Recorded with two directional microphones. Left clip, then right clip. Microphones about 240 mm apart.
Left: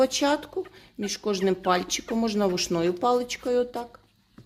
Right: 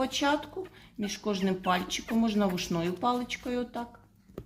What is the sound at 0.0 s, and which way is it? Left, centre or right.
Speech, left.